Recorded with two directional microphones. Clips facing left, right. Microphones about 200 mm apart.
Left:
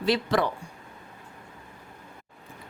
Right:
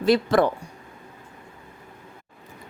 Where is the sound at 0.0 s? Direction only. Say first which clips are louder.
Right 6 dB; 45° right (ahead or behind).